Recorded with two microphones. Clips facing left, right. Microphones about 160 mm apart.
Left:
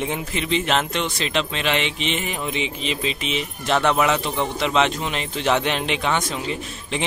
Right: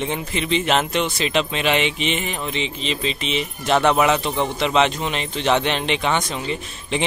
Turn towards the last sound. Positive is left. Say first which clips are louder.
# right 2 dB
turn(degrees=5)  # may be behind; listen again after turning